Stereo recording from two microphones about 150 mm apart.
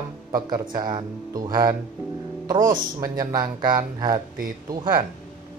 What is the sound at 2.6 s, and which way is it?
Speech, 65° right (ahead or behind).